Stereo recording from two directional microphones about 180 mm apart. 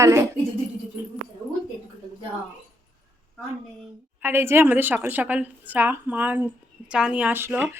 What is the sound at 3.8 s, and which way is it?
A woman's voice, 10° right (ahead or behind).